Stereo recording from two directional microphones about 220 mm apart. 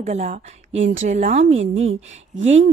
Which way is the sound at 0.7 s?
60° right (ahead or behind).